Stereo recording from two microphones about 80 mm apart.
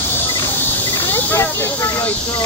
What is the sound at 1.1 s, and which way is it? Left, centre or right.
Speech, left.